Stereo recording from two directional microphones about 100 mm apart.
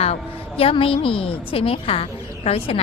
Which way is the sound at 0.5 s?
70° left (ahead or behind).